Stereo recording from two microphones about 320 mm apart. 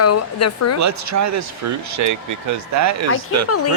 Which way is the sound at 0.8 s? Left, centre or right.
Right.